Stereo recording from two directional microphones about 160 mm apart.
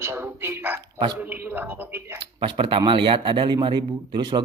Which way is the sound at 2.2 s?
35° right (ahead or behind).